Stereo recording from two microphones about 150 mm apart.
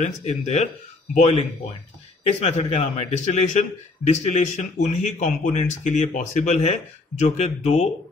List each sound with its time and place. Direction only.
0.0 s a man's voice: 50° left (ahead or behind)